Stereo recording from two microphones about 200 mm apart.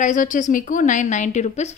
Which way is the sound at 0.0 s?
40° left (ahead or behind).